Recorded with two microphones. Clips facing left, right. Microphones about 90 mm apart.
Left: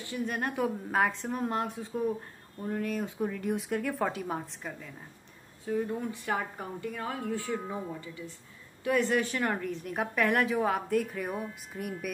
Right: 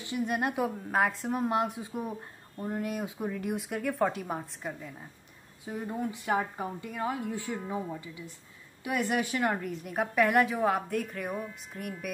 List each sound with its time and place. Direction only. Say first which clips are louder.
0.0 s speech: right 3 dB; 15° right (ahead or behind)
0.6 s a woman's voice: left 3 dB; 5° right (ahead or behind)
5.7 s speech: left 3 dB; 15° right (ahead or behind)
8.8 s a woman's voice: left 3 dB; 15° right (ahead or behind); by 12.1 s 5° left (ahead or behind)